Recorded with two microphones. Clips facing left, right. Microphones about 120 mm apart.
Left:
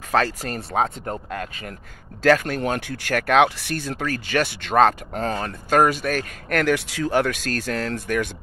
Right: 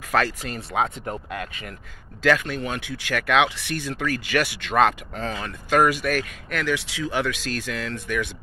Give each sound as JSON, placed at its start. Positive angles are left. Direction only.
{"t": 0.1, "sound": "speech", "side_deg": 30}
{"t": 6.5, "sound": "speech", "side_deg": 50}